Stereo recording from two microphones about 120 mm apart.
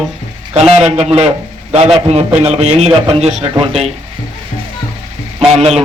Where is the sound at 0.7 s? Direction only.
60° right (ahead or behind).